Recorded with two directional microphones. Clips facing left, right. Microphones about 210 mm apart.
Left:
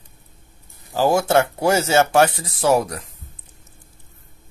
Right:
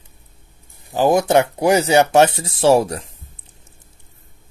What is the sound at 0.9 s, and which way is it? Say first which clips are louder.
Speech: right 2 dB; 20° right (ahead or behind).